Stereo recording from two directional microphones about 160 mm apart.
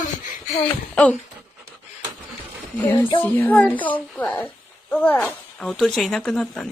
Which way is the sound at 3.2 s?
10° left (ahead or behind).